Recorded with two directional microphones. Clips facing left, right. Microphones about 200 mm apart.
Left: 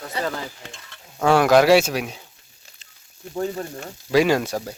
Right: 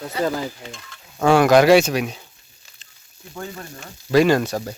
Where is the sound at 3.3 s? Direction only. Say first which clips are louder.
Left 7 dB; 30° left (ahead or behind).